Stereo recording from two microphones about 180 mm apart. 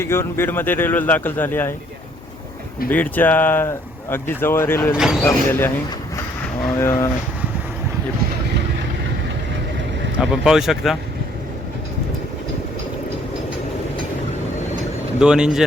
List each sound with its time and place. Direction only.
0.0 s speech: 15° left (ahead or behind)
2.9 s speech: 10° left (ahead or behind)
4.9 s speech: centre (ahead or behind)
5.2 s speech: 10° left (ahead or behind)
6.7 s speech: 15° left (ahead or behind)
10.2 s speech: 5° right (ahead or behind)
15.2 s speech: 5° right (ahead or behind)